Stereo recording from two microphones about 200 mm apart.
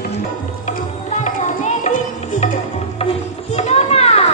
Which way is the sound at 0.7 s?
35° left (ahead or behind).